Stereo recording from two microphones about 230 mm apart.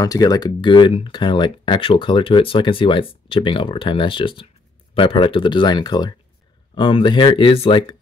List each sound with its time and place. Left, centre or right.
0.0 s speech: centre